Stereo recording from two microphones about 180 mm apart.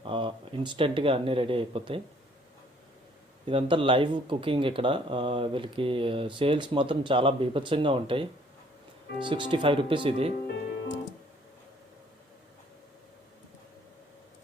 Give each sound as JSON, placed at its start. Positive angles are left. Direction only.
{"t": 0.0, "sound": "speech", "side_deg": -30}
{"t": 3.4, "sound": "speech", "side_deg": -30}
{"t": 10.4, "sound": "music", "side_deg": 85}